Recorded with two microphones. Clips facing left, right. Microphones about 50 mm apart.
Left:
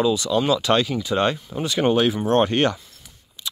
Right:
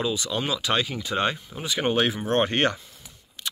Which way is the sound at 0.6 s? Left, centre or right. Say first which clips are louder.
Left 6 dB; centre.